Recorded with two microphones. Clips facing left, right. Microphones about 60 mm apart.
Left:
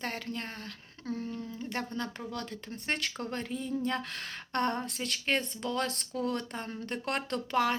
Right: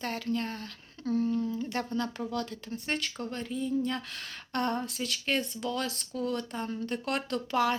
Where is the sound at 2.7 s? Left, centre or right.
Left.